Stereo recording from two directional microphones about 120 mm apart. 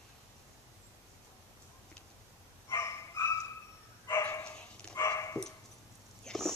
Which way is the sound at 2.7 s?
25° left (ahead or behind).